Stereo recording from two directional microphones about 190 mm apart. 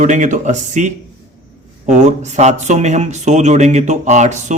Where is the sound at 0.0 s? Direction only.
40° right (ahead or behind).